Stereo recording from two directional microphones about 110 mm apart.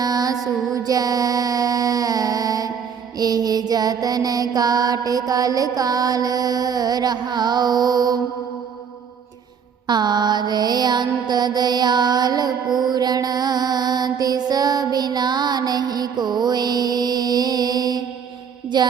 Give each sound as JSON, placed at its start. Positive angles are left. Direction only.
{"t": 0.0, "sound": "a sound", "side_deg": -35}
{"t": 3.2, "sound": "mantra", "side_deg": -35}
{"t": 9.8, "sound": "mantra", "side_deg": -40}
{"t": 18.7, "sound": "music", "side_deg": -40}